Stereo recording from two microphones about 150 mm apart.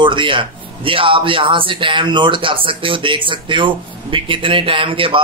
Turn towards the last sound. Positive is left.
turn(degrees=-35)  # may be behind; listen again after turning